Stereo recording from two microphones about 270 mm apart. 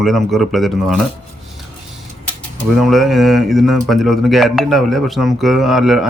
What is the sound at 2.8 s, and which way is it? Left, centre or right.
Speech, centre.